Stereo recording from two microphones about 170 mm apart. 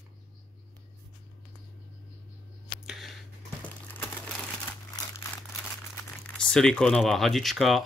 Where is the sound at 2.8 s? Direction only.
Centre (ahead or behind).